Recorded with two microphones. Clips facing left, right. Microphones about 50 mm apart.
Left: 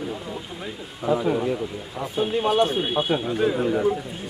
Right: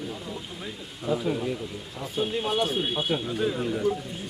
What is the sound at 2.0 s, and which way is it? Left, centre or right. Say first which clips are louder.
Speech: left 5 dB; centre.